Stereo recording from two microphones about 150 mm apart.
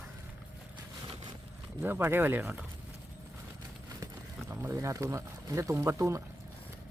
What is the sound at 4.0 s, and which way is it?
Speech, 15° right (ahead or behind).